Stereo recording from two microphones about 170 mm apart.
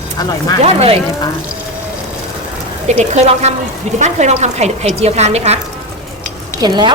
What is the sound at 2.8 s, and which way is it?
A woman's voice, 40° right (ahead or behind).